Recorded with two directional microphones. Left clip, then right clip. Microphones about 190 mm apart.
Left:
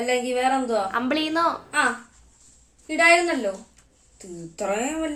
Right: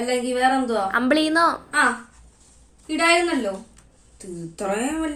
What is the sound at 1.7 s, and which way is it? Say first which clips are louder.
A woman's voice: right 3 dB; 5° left (ahead or behind).